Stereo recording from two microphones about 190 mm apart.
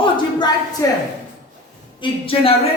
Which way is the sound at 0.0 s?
20° left (ahead or behind).